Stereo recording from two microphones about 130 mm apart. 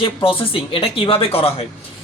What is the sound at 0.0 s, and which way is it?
A woman's voice, 45° left (ahead or behind).